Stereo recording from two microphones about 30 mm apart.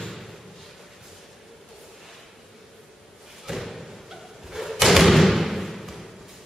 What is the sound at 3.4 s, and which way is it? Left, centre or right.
Slam, centre.